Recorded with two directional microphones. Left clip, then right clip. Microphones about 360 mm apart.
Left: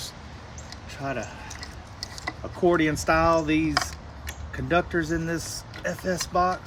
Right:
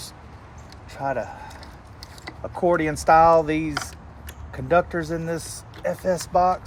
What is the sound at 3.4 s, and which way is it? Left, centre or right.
Speech, right.